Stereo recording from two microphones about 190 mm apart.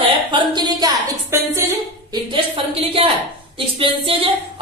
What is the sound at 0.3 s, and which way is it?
Speech, 25° right (ahead or behind).